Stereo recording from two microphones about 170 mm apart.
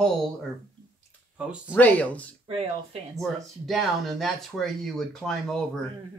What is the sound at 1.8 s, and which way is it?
Speech, 10° left (ahead or behind).